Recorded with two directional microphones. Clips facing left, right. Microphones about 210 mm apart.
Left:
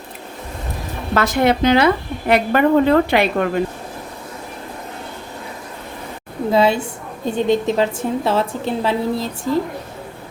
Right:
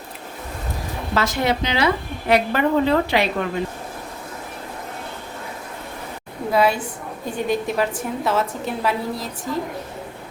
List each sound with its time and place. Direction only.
1.1 s a woman's voice: 55° left (ahead or behind)
6.5 s a woman's voice: 25° left (ahead or behind)